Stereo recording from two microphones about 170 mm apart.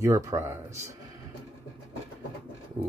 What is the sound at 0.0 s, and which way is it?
Speech, 15° right (ahead or behind).